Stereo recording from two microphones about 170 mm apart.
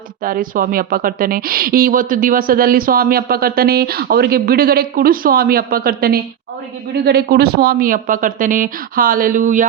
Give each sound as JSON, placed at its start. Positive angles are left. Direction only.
{"t": 0.3, "sound": "speech", "side_deg": -55}